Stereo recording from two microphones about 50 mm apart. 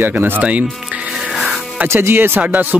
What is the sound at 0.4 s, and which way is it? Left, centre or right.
Speech, right.